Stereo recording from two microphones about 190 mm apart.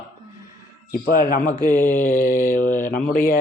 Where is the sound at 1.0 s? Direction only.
50° left (ahead or behind).